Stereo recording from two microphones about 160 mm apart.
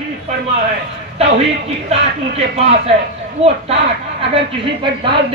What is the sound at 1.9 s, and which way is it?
Speech, 40° right (ahead or behind).